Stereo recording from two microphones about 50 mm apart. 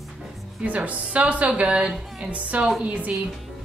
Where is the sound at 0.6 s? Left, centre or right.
Right.